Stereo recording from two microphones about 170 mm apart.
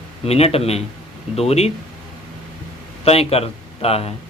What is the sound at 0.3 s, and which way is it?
A man's voice, 35° left (ahead or behind).